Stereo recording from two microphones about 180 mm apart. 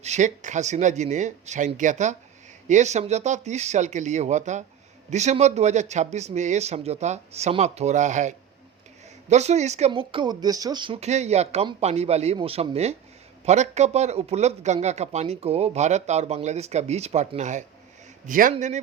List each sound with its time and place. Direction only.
0.0 s a man's voice: 40° right (ahead or behind)